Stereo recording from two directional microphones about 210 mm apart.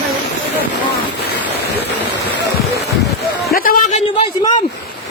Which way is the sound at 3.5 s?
45° left (ahead or behind).